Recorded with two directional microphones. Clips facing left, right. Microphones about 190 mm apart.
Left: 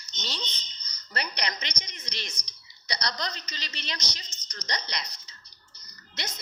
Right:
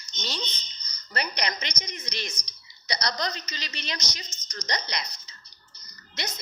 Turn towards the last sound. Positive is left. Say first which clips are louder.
# right 3 dB
turn(degrees=-45)  # may be behind; listen again after turning